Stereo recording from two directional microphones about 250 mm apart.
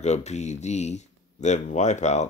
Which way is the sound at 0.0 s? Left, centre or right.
Left.